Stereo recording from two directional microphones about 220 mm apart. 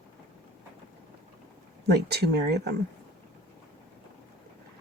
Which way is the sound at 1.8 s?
50° right (ahead or behind).